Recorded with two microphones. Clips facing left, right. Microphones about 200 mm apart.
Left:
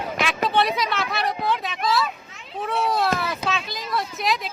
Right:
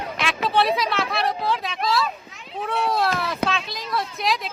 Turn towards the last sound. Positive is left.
turn(degrees=0)  # may be behind; listen again after turning